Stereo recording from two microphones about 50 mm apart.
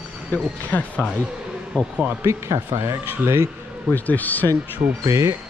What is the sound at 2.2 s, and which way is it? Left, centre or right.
Speech, right.